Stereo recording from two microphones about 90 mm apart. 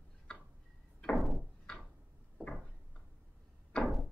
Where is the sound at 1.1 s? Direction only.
Centre (ahead or behind).